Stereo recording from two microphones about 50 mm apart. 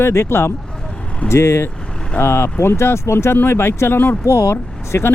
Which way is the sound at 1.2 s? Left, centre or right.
Left.